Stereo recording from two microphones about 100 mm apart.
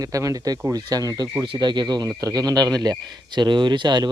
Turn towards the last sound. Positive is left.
turn(degrees=-45)  # may be behind; listen again after turning